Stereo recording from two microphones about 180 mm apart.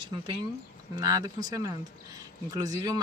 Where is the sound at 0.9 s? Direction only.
20° right (ahead or behind).